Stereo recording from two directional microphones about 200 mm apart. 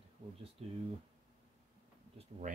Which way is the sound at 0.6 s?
30° right (ahead or behind).